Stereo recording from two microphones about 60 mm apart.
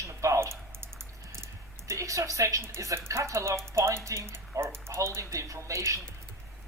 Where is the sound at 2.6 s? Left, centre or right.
Right.